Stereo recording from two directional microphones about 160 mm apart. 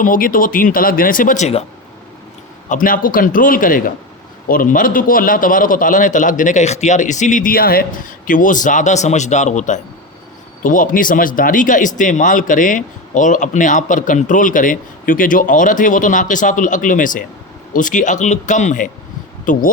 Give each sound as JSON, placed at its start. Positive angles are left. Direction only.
{"t": 0.0, "sound": "a man's voice", "side_deg": 60}
{"t": 2.6, "sound": "a man's voice", "side_deg": 55}